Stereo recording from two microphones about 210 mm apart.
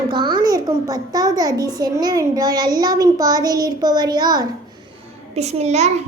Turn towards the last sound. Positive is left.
turn(degrees=-30)  # may be behind; listen again after turning